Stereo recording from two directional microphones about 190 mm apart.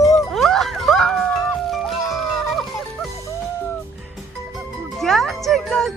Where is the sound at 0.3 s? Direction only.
Centre (ahead or behind).